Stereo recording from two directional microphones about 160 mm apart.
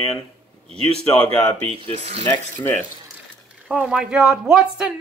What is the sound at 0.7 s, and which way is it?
A man's voice, 40° right (ahead or behind).